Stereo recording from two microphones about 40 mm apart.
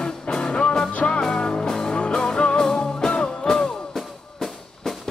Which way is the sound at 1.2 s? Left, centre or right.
Centre.